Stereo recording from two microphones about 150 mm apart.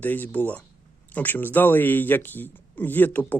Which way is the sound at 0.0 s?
10° left (ahead or behind).